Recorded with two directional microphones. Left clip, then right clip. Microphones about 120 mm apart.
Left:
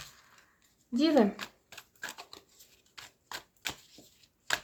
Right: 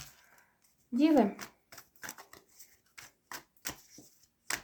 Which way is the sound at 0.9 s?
40° left (ahead or behind).